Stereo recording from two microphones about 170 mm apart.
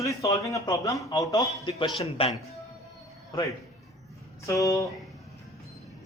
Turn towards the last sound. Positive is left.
turn(degrees=20)  # may be behind; listen again after turning